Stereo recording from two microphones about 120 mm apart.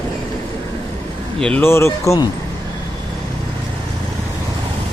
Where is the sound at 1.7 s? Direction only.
20° left (ahead or behind).